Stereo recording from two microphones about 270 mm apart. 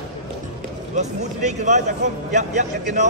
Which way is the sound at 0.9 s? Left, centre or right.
Right.